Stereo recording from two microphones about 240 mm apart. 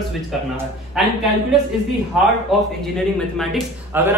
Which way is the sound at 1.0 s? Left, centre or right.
Centre.